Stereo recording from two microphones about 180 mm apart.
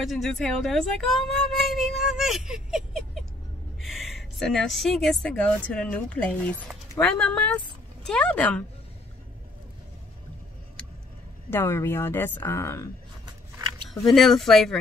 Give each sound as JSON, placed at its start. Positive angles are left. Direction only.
{"t": 0.0, "sound": "a woman's voice", "side_deg": 0}
{"t": 10.8, "sound": "vehicle", "side_deg": 5}
{"t": 11.5, "sound": "speech", "side_deg": 15}
{"t": 13.8, "sound": "speech", "side_deg": 0}